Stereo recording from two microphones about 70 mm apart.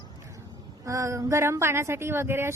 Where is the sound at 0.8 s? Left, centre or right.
Right.